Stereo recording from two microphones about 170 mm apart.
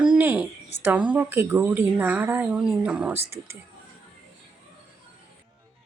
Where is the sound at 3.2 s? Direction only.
70° left (ahead or behind).